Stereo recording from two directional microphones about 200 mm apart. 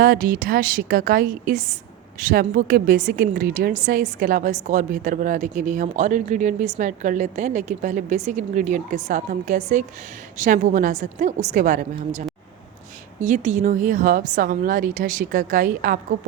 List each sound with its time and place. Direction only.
0.0 s a woman's voice: 45° right (ahead or behind)